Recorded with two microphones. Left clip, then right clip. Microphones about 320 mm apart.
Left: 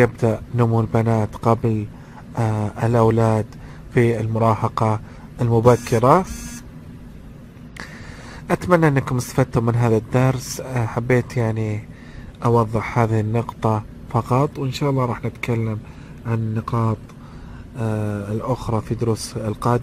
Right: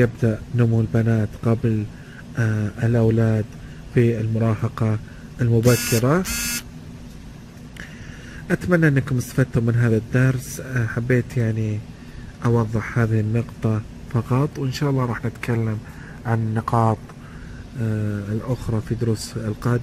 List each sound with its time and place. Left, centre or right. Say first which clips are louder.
0.0 s a man's voice: left 4 dB; centre
8.5 s a man's voice: left 3 dB; centre